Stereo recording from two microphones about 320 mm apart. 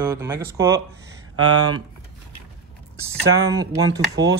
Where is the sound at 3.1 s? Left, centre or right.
Centre.